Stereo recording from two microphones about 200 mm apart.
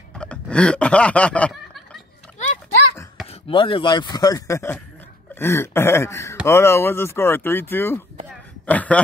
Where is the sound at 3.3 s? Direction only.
25° left (ahead or behind).